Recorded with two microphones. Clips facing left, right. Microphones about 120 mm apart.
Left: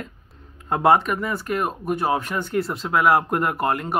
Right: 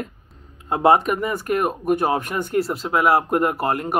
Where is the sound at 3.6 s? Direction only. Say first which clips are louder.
Even; 35° right (ahead or behind).